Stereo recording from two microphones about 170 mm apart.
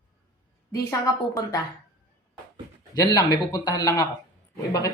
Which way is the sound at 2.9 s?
20° left (ahead or behind).